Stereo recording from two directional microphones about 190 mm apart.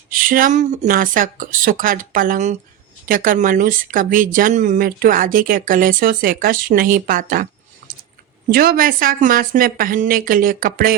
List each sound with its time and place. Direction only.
0.1 s speech: 45° right (ahead or behind)
7.8 s a sound: 40° right (ahead or behind)
8.4 s speech: 50° right (ahead or behind)